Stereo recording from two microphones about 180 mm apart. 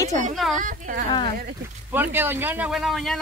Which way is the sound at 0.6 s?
45° right (ahead or behind).